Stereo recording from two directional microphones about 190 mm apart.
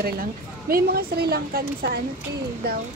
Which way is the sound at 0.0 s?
50° right (ahead or behind).